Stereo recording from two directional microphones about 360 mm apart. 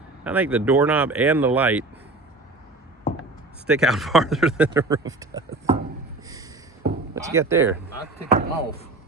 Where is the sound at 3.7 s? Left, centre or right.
Centre.